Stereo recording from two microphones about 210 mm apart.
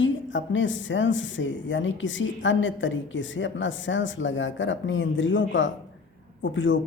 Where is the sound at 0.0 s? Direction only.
65° left (ahead or behind).